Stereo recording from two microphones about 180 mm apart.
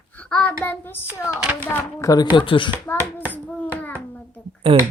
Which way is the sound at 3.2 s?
10° right (ahead or behind).